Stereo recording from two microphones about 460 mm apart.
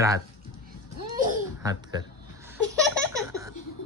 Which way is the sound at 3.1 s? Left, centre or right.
Centre.